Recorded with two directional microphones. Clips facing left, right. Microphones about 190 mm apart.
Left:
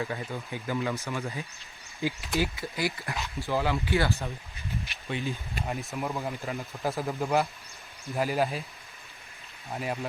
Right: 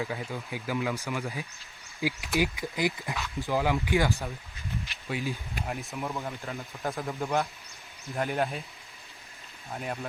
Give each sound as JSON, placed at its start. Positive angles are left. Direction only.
{"t": 0.0, "sound": "speech", "side_deg": -5}
{"t": 9.7, "sound": "speech", "side_deg": 5}